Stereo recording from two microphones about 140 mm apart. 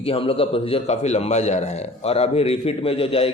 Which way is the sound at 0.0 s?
45° left (ahead or behind).